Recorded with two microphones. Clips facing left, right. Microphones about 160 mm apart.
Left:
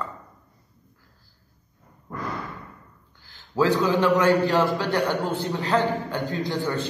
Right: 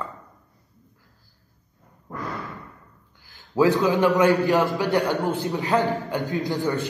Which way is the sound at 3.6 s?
20° right (ahead or behind).